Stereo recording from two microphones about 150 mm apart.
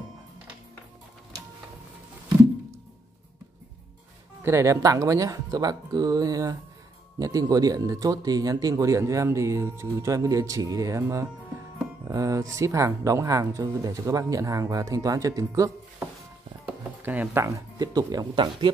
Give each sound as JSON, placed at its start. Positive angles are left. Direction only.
{"t": 4.4, "sound": "speech", "side_deg": -20}
{"t": 16.6, "sound": "speech", "side_deg": -10}